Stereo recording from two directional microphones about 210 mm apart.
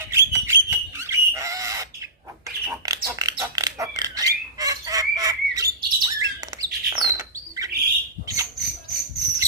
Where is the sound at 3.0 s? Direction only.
15° right (ahead or behind).